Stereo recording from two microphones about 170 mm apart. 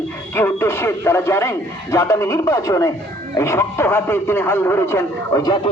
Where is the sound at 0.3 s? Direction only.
15° left (ahead or behind).